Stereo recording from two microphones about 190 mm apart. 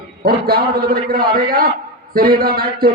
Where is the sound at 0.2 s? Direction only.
55° right (ahead or behind).